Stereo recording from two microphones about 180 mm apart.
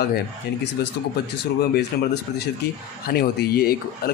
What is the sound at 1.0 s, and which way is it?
Speech, 70° left (ahead or behind).